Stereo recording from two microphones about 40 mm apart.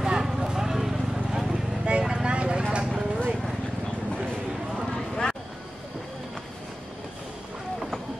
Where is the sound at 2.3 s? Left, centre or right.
Right.